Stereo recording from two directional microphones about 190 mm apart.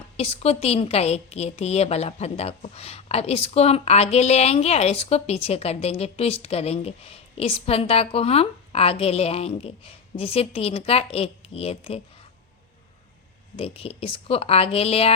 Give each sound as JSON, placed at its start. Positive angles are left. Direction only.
{"t": 0.2, "sound": "a woman's voice", "side_deg": 30}
{"t": 13.6, "sound": "a woman's voice", "side_deg": 30}